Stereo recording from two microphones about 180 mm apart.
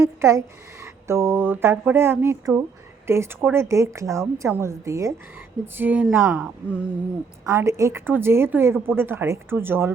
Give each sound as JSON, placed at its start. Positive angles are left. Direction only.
{"t": 0.0, "sound": "a woman's voice", "side_deg": -15}